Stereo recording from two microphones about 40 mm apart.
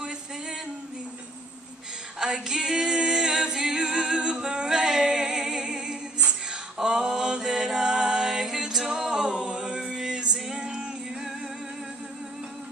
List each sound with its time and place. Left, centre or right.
2.1 s a capella: centre
6.8 s mantra: centre
10.5 s music: centre